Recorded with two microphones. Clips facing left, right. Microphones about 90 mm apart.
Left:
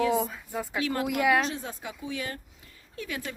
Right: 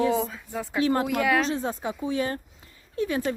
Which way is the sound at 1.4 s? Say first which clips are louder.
Right 6 dB; 35° right (ahead or behind).